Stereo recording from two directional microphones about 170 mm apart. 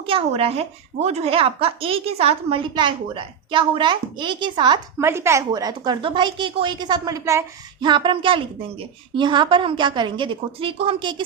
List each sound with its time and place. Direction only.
0.0 s a woman's voice: 35° right (ahead or behind)
4.9 s a woman's voice: 15° right (ahead or behind)